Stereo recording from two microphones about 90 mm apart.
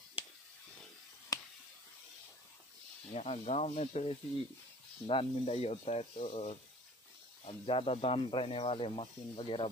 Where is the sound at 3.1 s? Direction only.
90° left.